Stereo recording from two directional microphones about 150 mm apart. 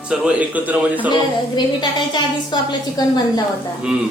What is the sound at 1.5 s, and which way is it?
A woman's voice, 30° left (ahead or behind).